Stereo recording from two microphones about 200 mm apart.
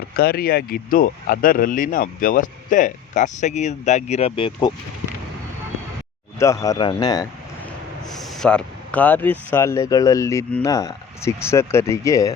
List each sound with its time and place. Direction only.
0.2 s speech: 50° left (ahead or behind); by 4.7 s 25° left (ahead or behind)
6.4 s speech: 15° left (ahead or behind)
8.2 s speech: centre (ahead or behind)